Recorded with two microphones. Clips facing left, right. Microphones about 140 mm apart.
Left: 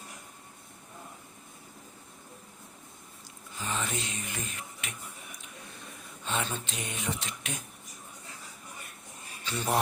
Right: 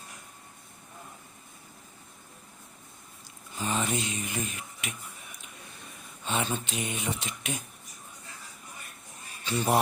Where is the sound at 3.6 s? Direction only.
15° right (ahead or behind).